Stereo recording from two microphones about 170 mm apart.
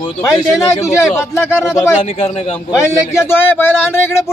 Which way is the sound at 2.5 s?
15° left (ahead or behind).